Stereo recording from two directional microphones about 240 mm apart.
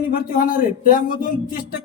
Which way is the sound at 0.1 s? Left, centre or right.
Left.